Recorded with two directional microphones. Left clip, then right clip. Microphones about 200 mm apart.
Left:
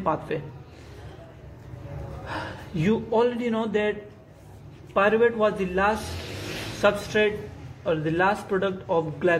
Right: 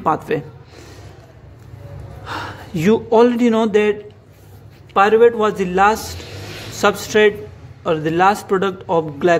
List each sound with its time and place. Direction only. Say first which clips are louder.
0.0 s a man's voice: right 8 dB; 35° right (ahead or behind)
2.2 s a man's voice: right 7 dB; 30° right (ahead or behind); by 3.9 s 45° right (ahead or behind)
4.9 s a man's voice: right 9 dB; 35° right (ahead or behind)